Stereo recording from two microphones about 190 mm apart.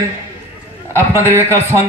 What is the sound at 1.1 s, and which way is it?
Speech, 15° right (ahead or behind).